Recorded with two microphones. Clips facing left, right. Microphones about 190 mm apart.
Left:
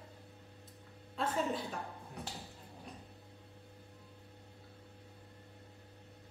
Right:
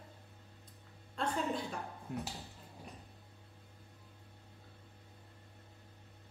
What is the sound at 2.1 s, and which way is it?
Speech, 65° right (ahead or behind).